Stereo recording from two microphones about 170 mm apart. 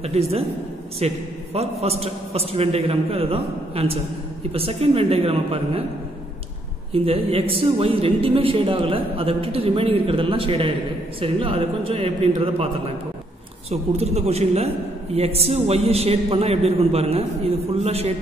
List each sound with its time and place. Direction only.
0.0 s a man's voice: 35° right (ahead or behind)
6.9 s a man's voice: 35° right (ahead or behind)
13.7 s a man's voice: 40° right (ahead or behind)